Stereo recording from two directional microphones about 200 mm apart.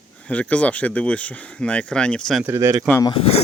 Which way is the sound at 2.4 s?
15° right (ahead or behind).